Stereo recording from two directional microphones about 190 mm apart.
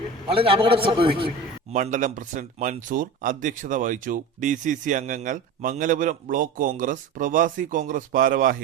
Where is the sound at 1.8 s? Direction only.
40° right (ahead or behind).